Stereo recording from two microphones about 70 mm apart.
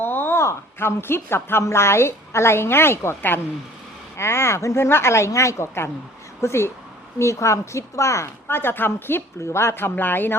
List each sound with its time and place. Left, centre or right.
0.0 s a sound: left
0.4 s a woman's voice: left
8.4 s a woman's voice: left